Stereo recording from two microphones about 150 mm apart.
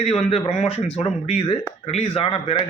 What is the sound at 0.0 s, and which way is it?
A man's voice, 45° left (ahead or behind).